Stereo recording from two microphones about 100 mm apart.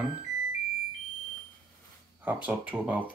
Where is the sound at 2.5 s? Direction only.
15° right (ahead or behind).